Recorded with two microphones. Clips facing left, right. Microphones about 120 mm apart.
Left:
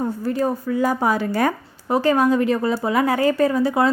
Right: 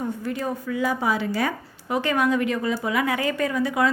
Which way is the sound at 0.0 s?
35° left (ahead or behind).